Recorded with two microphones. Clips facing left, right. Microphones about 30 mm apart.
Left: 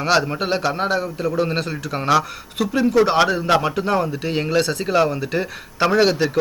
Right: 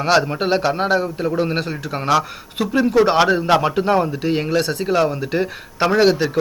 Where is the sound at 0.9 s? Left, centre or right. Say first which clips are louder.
Right 2 dB; right.